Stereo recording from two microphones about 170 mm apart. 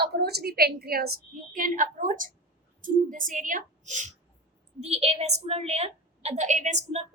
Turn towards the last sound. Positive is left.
turn(degrees=-40)  # may be behind; listen again after turning